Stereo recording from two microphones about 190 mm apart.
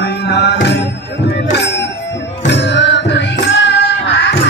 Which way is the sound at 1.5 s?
65° left (ahead or behind).